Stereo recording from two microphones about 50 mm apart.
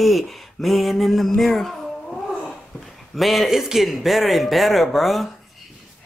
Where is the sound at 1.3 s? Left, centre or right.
Centre.